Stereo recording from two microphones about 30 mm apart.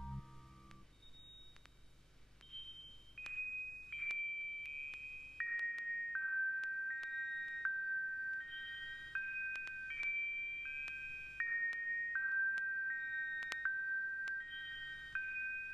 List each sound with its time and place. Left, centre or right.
2.5 s chime: centre